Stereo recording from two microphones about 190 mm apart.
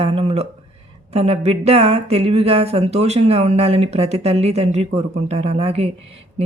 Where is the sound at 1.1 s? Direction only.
35° right (ahead or behind).